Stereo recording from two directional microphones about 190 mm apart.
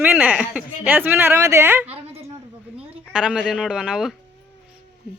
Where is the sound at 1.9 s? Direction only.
30° right (ahead or behind).